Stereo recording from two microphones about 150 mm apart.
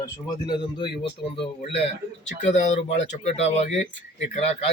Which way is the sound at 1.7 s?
45° left (ahead or behind).